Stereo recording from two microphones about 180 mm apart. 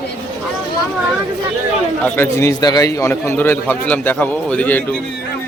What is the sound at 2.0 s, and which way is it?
A man's voice, 15° left (ahead or behind).